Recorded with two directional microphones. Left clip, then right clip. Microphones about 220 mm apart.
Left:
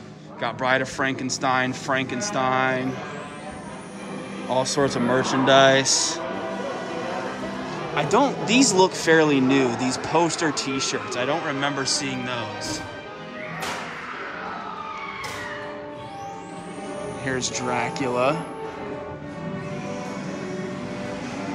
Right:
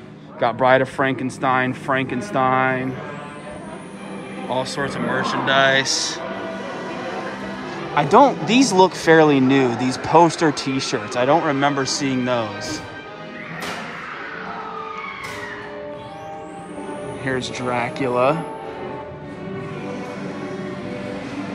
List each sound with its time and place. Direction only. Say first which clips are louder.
0.4 s speech: right 7 dB; centre (ahead or behind)
4.5 s speech: left 1 dB; 25° left (ahead or behind)
7.9 s speech: right 7 dB; 5° left (ahead or behind)
17.2 s speech: right 2 dB; 10° left (ahead or behind)